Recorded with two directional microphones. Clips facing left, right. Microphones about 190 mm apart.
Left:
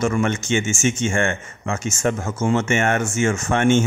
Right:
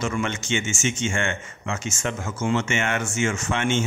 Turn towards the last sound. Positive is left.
turn(degrees=50)  # may be behind; listen again after turning